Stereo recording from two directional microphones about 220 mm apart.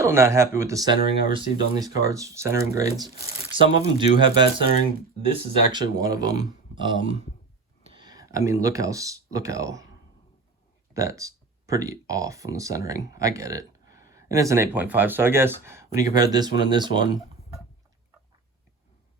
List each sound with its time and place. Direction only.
0.0 s speech: 10° right (ahead or behind)
10.9 s speech: 15° right (ahead or behind)